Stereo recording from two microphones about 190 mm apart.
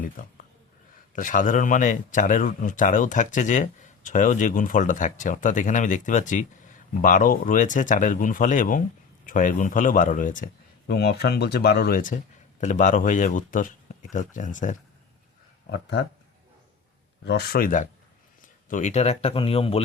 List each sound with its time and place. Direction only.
0.2 s speech: 45° left (ahead or behind)
15.7 s speech: 65° left (ahead or behind)
17.2 s speech: 55° left (ahead or behind); by 19.8 s 30° left (ahead or behind)